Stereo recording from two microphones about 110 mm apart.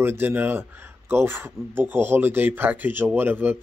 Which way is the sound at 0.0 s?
20° right (ahead or behind).